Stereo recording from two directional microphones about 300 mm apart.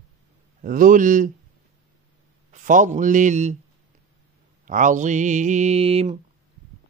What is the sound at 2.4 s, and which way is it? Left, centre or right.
A man's voice, right.